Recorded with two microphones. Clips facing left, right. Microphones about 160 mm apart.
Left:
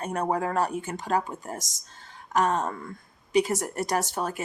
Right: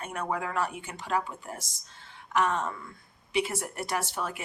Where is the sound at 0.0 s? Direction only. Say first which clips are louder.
Left 6 dB; 40° left (ahead or behind).